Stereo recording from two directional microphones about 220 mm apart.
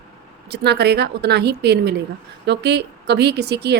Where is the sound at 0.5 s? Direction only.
50° right (ahead or behind).